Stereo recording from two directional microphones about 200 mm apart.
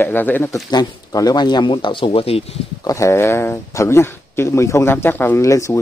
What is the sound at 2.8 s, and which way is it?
Speech, 15° left (ahead or behind).